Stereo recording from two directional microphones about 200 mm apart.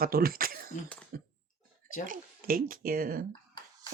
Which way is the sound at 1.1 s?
50° right (ahead or behind).